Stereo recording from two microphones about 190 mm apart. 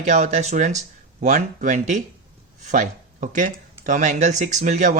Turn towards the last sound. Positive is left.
turn(degrees=-40)  # may be behind; listen again after turning